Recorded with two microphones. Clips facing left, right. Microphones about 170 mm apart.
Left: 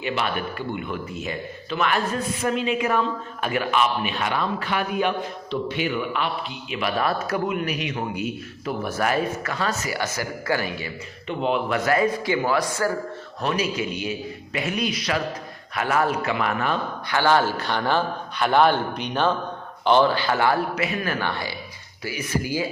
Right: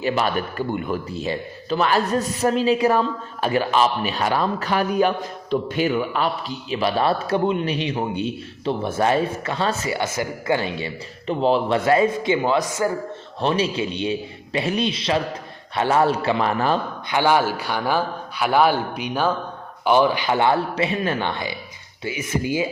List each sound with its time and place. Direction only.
0.0 s a man's voice: 40° right (ahead or behind)
17.1 s a man's voice: 15° right (ahead or behind)